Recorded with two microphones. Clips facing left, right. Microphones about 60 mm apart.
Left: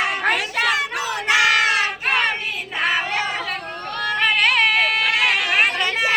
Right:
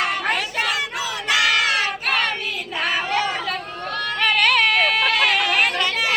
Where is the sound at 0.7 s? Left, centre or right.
Left.